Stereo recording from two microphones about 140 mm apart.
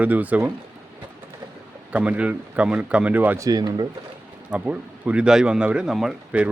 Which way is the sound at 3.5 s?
30° right (ahead or behind).